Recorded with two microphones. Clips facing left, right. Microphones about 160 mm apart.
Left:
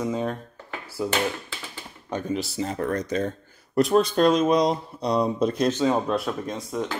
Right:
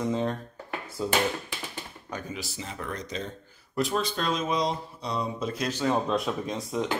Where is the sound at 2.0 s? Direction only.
30° left (ahead or behind); by 3.3 s 50° left (ahead or behind).